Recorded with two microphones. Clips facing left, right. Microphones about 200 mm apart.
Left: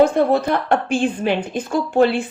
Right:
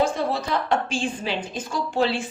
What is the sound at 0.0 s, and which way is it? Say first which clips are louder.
A woman's voice: left 8 dB; 55° left (ahead or behind).